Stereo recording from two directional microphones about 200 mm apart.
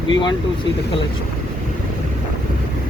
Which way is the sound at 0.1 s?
25° left (ahead or behind).